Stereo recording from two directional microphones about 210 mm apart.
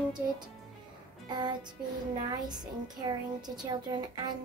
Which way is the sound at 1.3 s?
20° right (ahead or behind).